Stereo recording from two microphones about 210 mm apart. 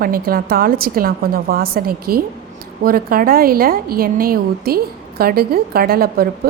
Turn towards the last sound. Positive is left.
turn(degrees=-45)  # may be behind; listen again after turning